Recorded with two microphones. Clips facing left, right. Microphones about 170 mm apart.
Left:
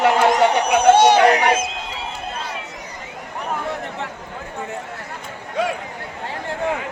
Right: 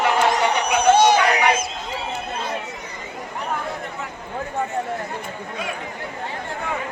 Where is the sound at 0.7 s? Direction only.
55° left (ahead or behind).